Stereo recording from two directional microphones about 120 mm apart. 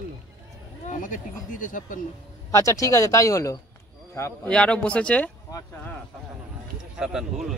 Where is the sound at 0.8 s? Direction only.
90° left.